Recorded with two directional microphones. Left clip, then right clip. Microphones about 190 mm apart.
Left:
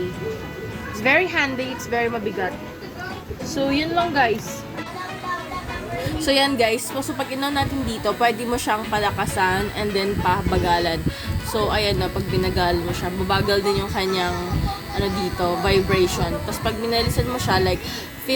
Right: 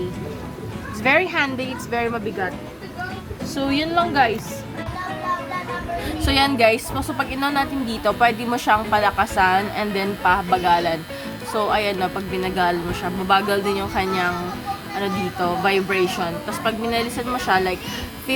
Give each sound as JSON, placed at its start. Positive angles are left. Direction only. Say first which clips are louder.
{"t": 1.0, "sound": "a woman's voice", "louder": "even", "side_deg": -10}
{"t": 3.5, "sound": "a woman's voice", "louder": "even", "side_deg": -15}
{"t": 6.1, "sound": "a woman's voice", "louder": "even", "side_deg": -10}